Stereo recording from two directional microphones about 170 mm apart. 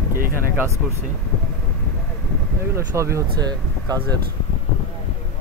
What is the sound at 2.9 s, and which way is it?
Speech, 20° right (ahead or behind).